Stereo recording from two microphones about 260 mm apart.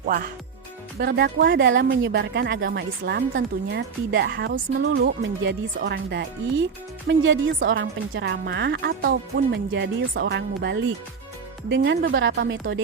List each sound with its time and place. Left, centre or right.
0.0 s a woman's voice: right